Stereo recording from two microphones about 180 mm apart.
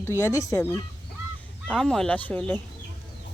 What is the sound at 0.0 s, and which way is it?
Speech, 15° left (ahead or behind).